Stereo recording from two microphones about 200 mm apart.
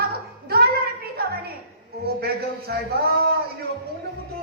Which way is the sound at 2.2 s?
50° right (ahead or behind).